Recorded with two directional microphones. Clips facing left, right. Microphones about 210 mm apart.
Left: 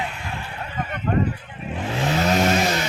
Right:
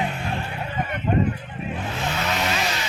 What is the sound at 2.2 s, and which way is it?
Vehicle, 40° left (ahead or behind).